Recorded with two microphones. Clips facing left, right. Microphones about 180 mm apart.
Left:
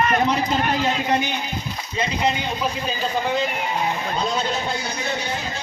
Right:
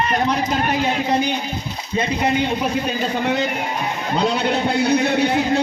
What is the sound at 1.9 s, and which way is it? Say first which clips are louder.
Speech: right 4 dB; 55° right (ahead or behind).